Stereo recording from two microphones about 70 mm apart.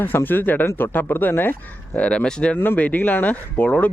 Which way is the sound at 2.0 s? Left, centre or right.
Centre.